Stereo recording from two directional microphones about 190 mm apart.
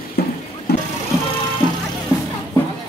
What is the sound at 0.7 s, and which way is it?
Vehicle, 55° left (ahead or behind).